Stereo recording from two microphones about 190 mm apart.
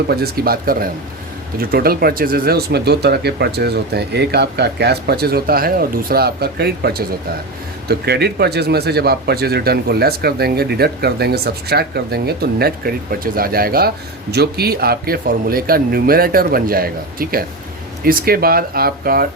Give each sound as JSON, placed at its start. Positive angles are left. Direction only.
{"t": 0.1, "sound": "speech", "side_deg": -55}